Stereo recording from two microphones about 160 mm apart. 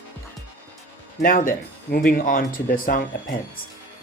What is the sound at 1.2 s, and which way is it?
Speech, 60° left (ahead or behind).